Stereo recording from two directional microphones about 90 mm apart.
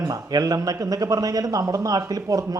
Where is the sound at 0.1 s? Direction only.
45° right (ahead or behind).